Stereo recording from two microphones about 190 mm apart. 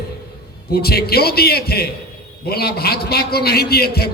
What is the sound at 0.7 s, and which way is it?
A man's voice, 55° left (ahead or behind).